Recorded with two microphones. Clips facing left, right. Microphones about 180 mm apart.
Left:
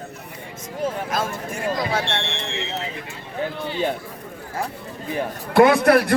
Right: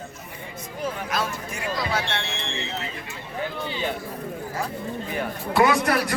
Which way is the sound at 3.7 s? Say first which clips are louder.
Left 7 dB; 50° left (ahead or behind).